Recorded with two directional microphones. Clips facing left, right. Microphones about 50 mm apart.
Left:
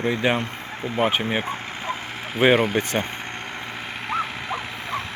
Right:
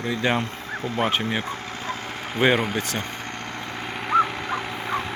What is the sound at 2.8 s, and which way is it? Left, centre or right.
Speech, left.